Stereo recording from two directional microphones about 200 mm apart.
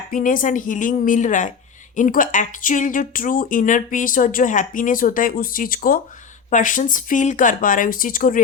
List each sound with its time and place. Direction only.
0.1 s speech: 40° left (ahead or behind)